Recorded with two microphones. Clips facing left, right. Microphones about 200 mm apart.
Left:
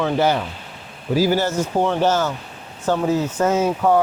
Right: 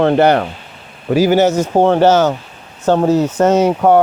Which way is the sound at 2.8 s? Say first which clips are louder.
Right 7 dB; 65° right (ahead or behind).